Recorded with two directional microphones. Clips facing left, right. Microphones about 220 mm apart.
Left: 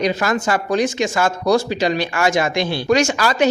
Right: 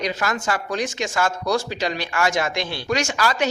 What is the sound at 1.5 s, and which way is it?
Speech, 15° left (ahead or behind).